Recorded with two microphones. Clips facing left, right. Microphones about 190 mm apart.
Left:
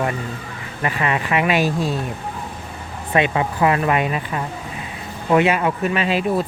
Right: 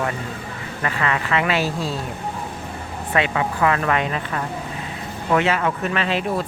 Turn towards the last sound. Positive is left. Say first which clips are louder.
# left 3 dB
turn(degrees=10)  # may be behind; listen again after turning